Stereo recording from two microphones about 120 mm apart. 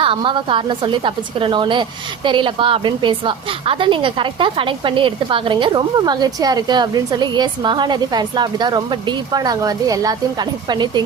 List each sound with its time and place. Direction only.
0.0 s a woman's voice: 45° right (ahead or behind)